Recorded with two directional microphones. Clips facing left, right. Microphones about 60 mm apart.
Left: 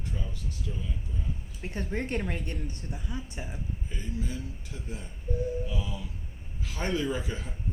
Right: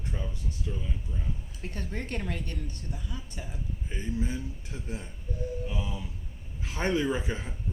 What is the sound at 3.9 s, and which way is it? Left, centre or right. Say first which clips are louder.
Speech: right 5 dB; right.